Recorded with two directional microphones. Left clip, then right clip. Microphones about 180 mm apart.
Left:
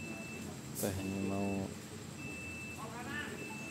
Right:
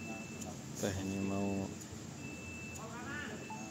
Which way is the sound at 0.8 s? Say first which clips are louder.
Even; 5° left (ahead or behind).